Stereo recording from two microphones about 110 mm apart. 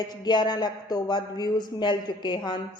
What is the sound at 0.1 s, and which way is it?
A woman's voice, 40° left (ahead or behind).